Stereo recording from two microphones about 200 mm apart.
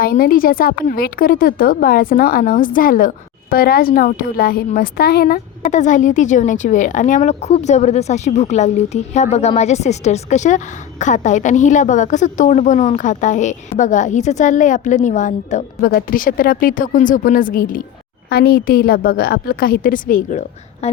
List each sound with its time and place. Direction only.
0.0 s a woman's voice: 45° left (ahead or behind)
20.8 s speech: 30° left (ahead or behind)